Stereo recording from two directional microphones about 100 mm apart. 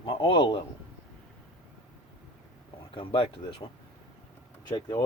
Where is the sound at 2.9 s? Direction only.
60° left (ahead or behind).